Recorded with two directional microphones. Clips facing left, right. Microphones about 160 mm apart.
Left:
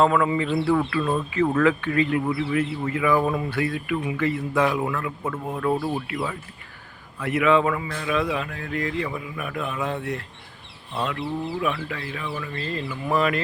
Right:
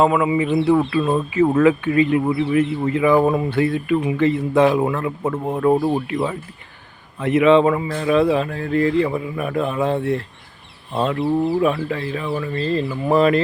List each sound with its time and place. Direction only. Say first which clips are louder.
0.0 s a man's voice: right 3 dB; 15° right (ahead or behind); by 13.4 s 30° right (ahead or behind)